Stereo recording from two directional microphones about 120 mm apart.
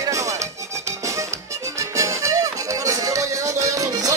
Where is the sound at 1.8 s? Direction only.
25° right (ahead or behind).